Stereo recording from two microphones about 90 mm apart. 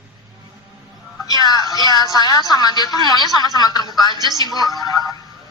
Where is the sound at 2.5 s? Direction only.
50° left (ahead or behind).